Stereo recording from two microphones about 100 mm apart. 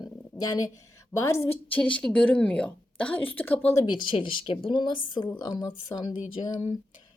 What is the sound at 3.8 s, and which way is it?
A woman's voice, 50° left (ahead or behind).